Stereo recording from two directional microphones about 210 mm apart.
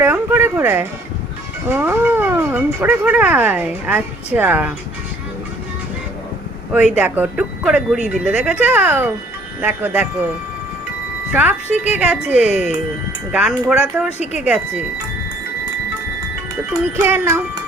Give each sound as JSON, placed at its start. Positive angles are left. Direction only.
{"t": 0.0, "sound": "speech", "side_deg": -10}
{"t": 6.9, "sound": "speech", "side_deg": -5}
{"t": 11.3, "sound": "speech", "side_deg": -5}
{"t": 16.8, "sound": "speech", "side_deg": -10}